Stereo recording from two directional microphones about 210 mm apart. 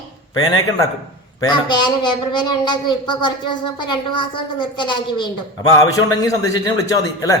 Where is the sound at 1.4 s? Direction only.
20° left (ahead or behind).